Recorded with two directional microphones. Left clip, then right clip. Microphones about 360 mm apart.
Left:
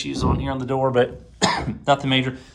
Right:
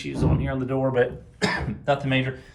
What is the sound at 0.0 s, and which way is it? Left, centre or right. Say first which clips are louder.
Speech: left 3 dB; centre.